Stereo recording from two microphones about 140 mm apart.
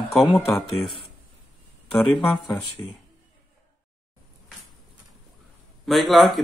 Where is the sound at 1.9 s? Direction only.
5° left (ahead or behind).